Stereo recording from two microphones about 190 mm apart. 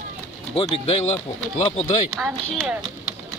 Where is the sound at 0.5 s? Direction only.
30° left (ahead or behind).